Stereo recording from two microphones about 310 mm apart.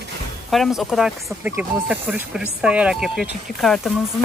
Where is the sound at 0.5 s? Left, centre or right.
Centre.